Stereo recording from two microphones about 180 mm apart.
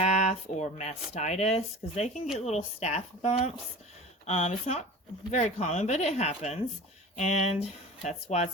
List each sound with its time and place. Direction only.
0.0 s speech: 40° left (ahead or behind)